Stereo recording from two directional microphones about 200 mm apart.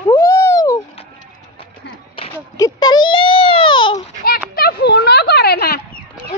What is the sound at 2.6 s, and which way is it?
Baby cry, 20° left (ahead or behind).